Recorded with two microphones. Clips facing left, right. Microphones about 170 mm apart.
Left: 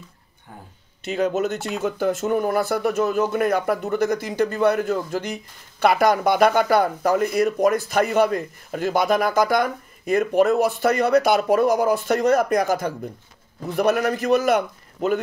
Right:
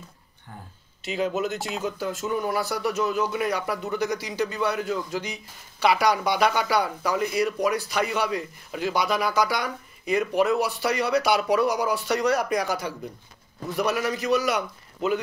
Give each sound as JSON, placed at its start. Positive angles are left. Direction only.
{"t": 1.0, "sound": "speech", "side_deg": 55}